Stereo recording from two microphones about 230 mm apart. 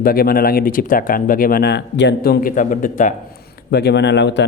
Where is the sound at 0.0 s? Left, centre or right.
Left.